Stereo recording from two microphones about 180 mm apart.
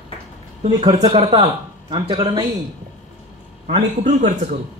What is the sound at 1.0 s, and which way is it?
Speech, 25° right (ahead or behind).